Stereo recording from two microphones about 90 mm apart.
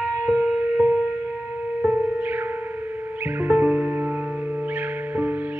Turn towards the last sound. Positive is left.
turn(degrees=-15)  # may be behind; listen again after turning